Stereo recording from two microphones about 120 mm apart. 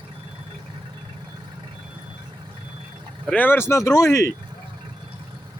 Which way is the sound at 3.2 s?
15° left (ahead or behind).